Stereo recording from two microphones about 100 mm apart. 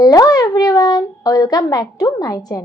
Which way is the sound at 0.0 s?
40° left (ahead or behind).